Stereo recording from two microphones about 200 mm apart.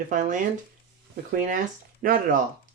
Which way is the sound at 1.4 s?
40° right (ahead or behind).